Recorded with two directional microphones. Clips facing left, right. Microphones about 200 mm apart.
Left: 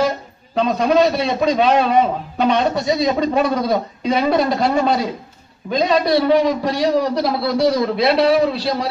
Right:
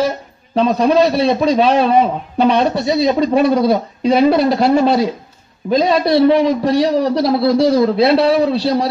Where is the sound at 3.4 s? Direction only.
35° right (ahead or behind).